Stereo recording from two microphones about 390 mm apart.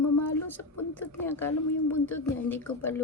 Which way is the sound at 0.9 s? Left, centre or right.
Centre.